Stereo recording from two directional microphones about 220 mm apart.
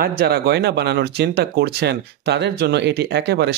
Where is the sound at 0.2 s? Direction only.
45° right (ahead or behind).